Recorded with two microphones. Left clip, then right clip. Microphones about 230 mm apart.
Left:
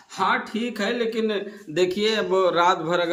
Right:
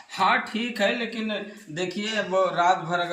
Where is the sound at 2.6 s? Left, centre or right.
Centre.